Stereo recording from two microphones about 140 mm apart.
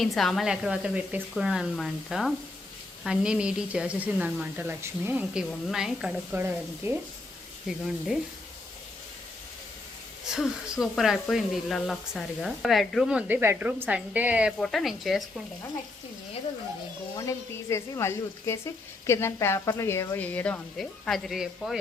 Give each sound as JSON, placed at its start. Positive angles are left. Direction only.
{"t": 0.0, "sound": "speech", "side_deg": 0}
{"t": 6.3, "sound": "speech", "side_deg": -15}
{"t": 7.9, "sound": "speech", "side_deg": 0}
{"t": 10.2, "sound": "speech", "side_deg": -5}
{"t": 14.6, "sound": "speech", "side_deg": 0}
{"t": 17.2, "sound": "speech", "side_deg": 20}